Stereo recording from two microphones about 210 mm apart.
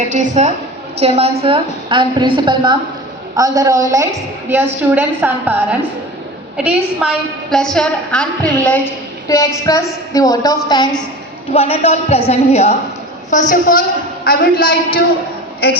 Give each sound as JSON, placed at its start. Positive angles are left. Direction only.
{"t": 0.1, "sound": "a woman's voice", "side_deg": -35}
{"t": 6.7, "sound": "a woman's voice", "side_deg": -5}
{"t": 11.5, "sound": "a woman's voice", "side_deg": 30}